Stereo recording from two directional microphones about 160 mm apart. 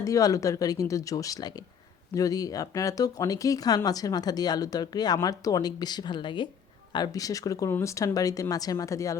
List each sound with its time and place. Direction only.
0.0 s speech: 20° left (ahead or behind)